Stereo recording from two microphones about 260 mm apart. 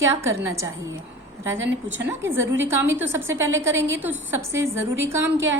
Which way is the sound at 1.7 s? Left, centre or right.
Right.